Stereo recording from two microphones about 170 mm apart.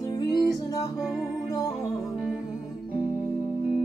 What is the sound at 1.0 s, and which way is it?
Music, 5° right (ahead or behind).